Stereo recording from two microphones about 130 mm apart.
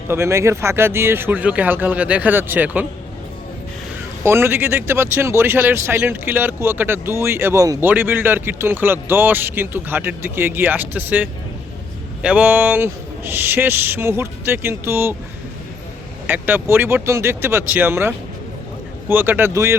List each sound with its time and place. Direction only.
0.1 s speech: 20° right (ahead or behind)
4.2 s speech: 20° right (ahead or behind)
7.9 s speech: 15° right (ahead or behind)
16.2 s speech: 15° right (ahead or behind)